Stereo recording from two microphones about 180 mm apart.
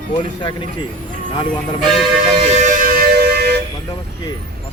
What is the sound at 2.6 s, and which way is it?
Music, 50° right (ahead or behind).